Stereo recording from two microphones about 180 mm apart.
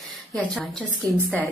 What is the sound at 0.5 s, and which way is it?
Speech, centre (ahead or behind).